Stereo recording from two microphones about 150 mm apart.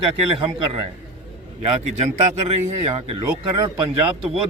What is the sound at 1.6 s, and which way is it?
Speech, 45° right (ahead or behind).